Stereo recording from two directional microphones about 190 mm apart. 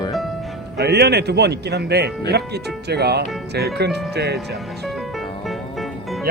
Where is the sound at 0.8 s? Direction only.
60° right (ahead or behind).